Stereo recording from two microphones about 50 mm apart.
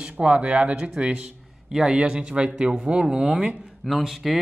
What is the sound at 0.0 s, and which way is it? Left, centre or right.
Speech, right.